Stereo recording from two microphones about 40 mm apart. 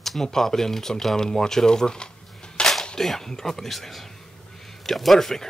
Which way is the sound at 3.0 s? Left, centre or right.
Centre.